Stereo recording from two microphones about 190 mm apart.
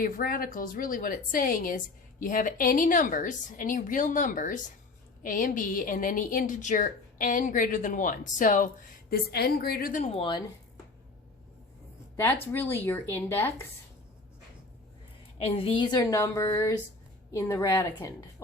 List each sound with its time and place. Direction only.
0.0 s a woman's voice: 50° left (ahead or behind)
10.0 s a woman's voice: 30° left (ahead or behind)
12.1 s speech: 10° left (ahead or behind)
15.4 s a woman's voice: 30° left (ahead or behind)